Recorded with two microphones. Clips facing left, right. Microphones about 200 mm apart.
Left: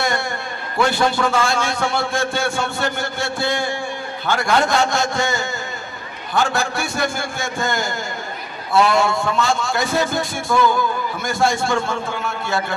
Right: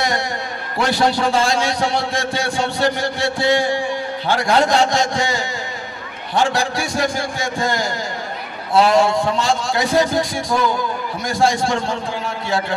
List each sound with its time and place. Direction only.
0.7 s a man's voice: 35° right (ahead or behind)